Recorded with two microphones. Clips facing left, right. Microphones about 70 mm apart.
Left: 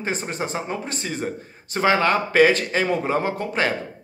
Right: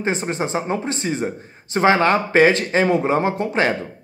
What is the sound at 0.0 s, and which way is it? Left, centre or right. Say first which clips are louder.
Speech: right 4 dB; right.